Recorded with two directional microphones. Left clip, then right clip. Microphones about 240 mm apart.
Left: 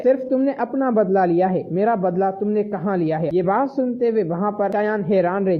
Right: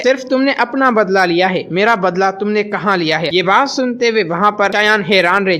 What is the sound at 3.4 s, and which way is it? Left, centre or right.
A woman's voice, right.